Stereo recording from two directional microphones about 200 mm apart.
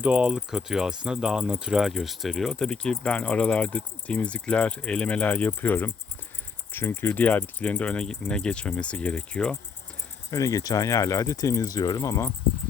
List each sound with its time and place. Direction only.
0.0 s speech: 5° right (ahead or behind)
10.3 s speech: 15° left (ahead or behind)